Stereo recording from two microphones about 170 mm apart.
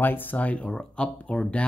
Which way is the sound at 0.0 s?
10° left (ahead or behind).